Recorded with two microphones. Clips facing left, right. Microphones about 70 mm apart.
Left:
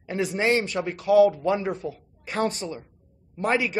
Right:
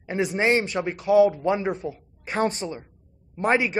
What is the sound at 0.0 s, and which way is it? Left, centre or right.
Speech, right.